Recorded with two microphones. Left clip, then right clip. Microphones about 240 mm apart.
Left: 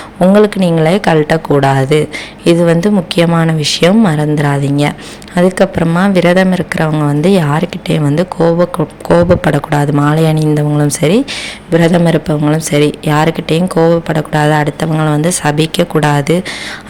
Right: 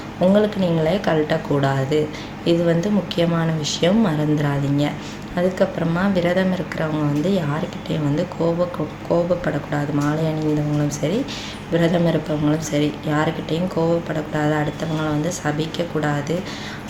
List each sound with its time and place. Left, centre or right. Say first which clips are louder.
0.2 s a woman's voice: left 9 dB; left